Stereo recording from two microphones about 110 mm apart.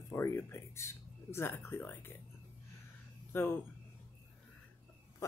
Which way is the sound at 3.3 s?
20° left (ahead or behind).